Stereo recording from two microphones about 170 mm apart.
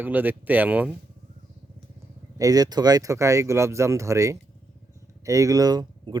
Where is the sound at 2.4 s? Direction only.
20° right (ahead or behind).